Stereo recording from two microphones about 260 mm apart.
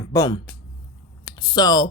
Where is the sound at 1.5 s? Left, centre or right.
Centre.